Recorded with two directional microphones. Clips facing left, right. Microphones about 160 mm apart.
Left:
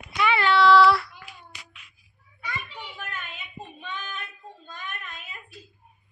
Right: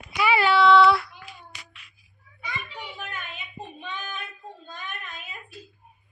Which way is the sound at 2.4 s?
15° right (ahead or behind).